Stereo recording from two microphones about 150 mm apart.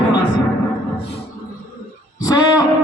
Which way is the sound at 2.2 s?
25° left (ahead or behind).